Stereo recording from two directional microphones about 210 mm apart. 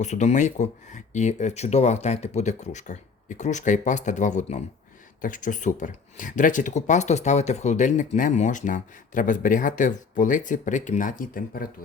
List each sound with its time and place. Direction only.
0.0 s speech: 35° left (ahead or behind)